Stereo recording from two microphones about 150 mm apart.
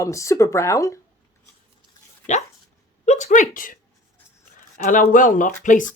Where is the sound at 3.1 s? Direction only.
50° left (ahead or behind).